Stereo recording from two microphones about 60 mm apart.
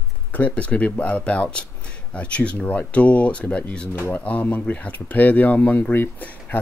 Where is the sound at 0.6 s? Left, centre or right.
Left.